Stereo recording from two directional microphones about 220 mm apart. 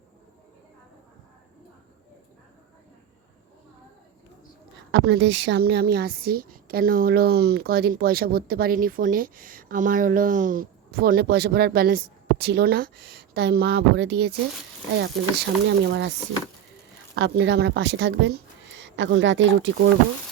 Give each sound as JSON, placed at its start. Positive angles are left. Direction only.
{"t": 4.9, "sound": "a woman's voice", "side_deg": -50}
{"t": 17.2, "sound": "a woman's voice", "side_deg": -50}